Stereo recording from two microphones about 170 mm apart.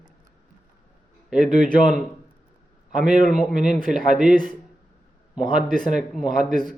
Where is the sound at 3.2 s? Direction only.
5° right (ahead or behind).